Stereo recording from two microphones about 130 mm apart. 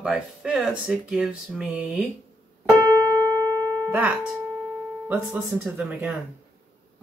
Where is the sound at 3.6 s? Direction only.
10° left (ahead or behind).